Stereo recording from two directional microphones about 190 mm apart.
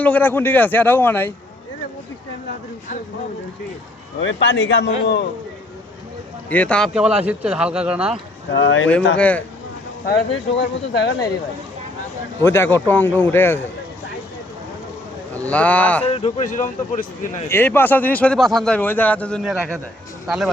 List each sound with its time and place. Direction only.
0.0 s a man's voice: 10° left (ahead or behind)
4.2 s a man's voice: 80° left
6.5 s speech: 5° left (ahead or behind)
8.5 s speech: 85° left
9.1 s a man's voice: 5° left (ahead or behind)
10.1 s speech: 65° left (ahead or behind)
12.4 s a man's voice: 10° left (ahead or behind)
15.4 s a man's voice: 5° left (ahead or behind)
16.0 s speech: 30° left (ahead or behind)
17.5 s a man's voice: 10° left (ahead or behind)